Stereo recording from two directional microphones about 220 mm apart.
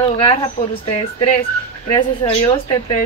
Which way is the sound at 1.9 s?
25° left (ahead or behind).